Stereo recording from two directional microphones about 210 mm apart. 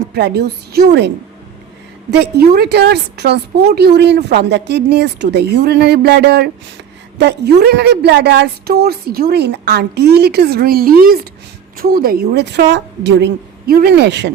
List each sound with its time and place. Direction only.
0.1 s a woman's voice: 50° right (ahead or behind)